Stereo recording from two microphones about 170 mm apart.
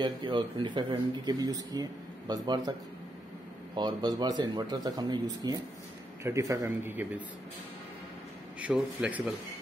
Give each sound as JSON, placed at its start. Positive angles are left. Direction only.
{"t": 0.0, "sound": "speech", "side_deg": -30}
{"t": 3.7, "sound": "speech", "side_deg": -25}
{"t": 8.5, "sound": "speech", "side_deg": -5}